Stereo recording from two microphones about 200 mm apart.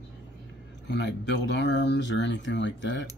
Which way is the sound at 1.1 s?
60° left (ahead or behind).